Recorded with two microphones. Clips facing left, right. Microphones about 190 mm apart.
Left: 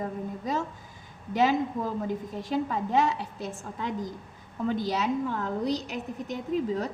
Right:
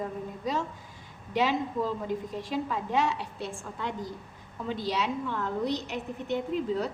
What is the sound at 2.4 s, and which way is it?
A woman's voice, 40° left (ahead or behind).